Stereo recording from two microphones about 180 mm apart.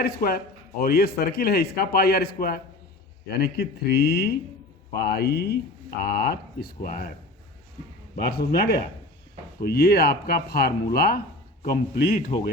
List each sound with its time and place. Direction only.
0.0 s speech: 60° left (ahead or behind)
8.1 s speech: 60° left (ahead or behind)